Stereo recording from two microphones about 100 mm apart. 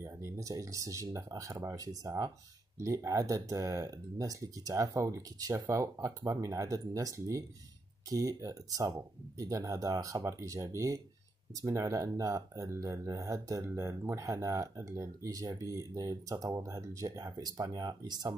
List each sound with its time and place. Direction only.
0.0 s speech: 30° right (ahead or behind)